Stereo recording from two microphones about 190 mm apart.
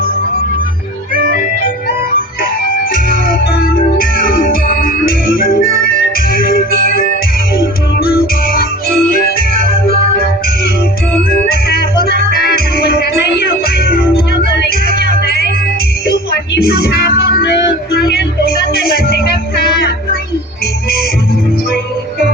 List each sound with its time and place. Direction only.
1.3 s music: 50° left (ahead or behind)
2.9 s music: 50° left (ahead or behind)
11.4 s music: 55° left (ahead or behind)
16.6 s music: 55° left (ahead or behind)